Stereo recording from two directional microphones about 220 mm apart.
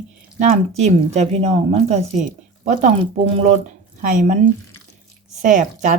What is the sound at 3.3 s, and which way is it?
Speech, 30° right (ahead or behind).